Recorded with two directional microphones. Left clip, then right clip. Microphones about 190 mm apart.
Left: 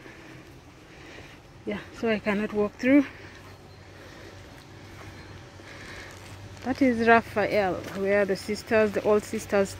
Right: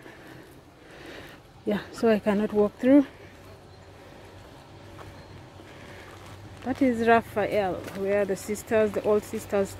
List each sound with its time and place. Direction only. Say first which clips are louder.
1.7 s speech: right 4 dB; 30° right (ahead or behind)
2.3 s speech: right 3 dB; 15° right (ahead or behind)
6.6 s speech: left 1 dB; centre (ahead or behind)